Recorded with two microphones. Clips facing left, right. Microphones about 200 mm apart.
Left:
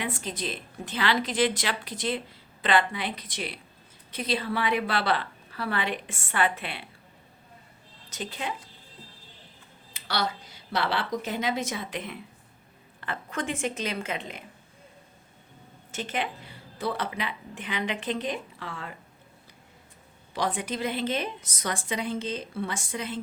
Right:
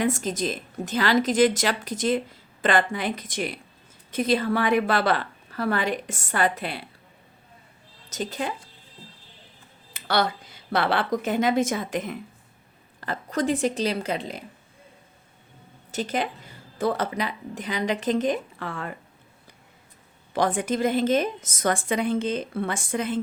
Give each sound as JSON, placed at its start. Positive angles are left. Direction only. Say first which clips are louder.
{"t": 0.0, "sound": "a woman's voice", "louder": "right 8 dB", "side_deg": -45}
{"t": 8.1, "sound": "a woman's voice", "louder": "right 5 dB", "side_deg": -40}
{"t": 9.9, "sound": "a sound", "louder": "right 6 dB", "side_deg": -50}
{"t": 10.7, "sound": "a woman's voice", "louder": "right 5 dB", "side_deg": -55}
{"t": 15.9, "sound": "a woman's voice", "louder": "right 5 dB", "side_deg": -40}
{"t": 20.3, "sound": "a woman's voice", "louder": "right 6 dB", "side_deg": -50}